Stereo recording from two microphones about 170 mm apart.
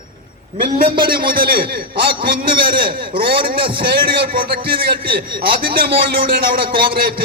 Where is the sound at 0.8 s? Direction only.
60° right (ahead or behind).